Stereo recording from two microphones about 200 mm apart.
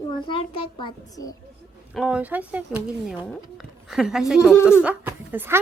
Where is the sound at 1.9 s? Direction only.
5° right (ahead or behind).